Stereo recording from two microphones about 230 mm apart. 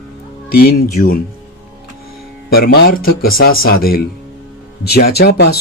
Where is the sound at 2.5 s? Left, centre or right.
Left.